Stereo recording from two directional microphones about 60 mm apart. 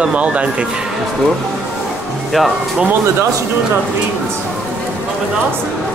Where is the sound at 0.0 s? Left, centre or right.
Right.